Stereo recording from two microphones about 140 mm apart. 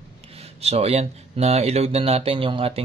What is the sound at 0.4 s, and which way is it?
Speech, 45° right (ahead or behind).